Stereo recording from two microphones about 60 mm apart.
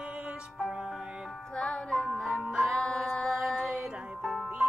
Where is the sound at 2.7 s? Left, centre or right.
Centre.